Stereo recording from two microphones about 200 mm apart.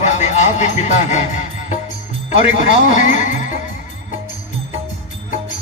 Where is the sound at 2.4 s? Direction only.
35° left (ahead or behind).